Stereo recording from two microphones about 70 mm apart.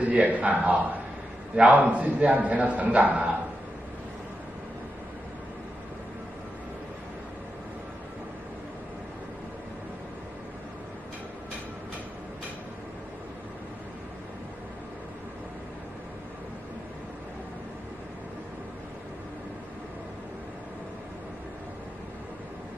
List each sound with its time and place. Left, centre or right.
0.0 s a man's voice: centre